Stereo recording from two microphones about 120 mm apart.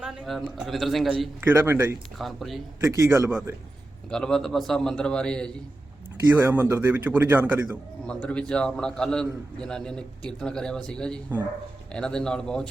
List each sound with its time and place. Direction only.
0.0 s speech: centre (ahead or behind)
1.4 s a man's voice: 20° right (ahead or behind)
2.1 s a man's voice: centre (ahead or behind)
2.8 s a man's voice: 20° right (ahead or behind)
4.1 s a man's voice: 5° left (ahead or behind)
6.3 s a man's voice: 15° right (ahead or behind)
8.0 s a man's voice: 10° left (ahead or behind)